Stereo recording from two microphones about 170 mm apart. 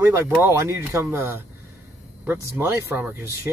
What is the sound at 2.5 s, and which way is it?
Speech, 15° right (ahead or behind).